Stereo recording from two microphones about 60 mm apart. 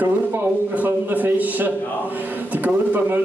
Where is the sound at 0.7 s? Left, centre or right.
Right.